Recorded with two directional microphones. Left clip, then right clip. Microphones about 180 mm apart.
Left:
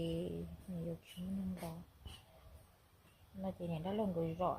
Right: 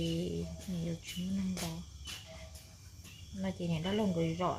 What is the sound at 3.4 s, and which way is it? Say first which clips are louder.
Speech: right 5 dB; 25° left (ahead or behind).